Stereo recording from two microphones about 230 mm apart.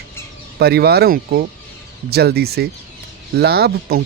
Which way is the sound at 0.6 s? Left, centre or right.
Right.